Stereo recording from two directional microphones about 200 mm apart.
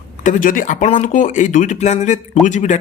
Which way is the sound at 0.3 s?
40° left (ahead or behind).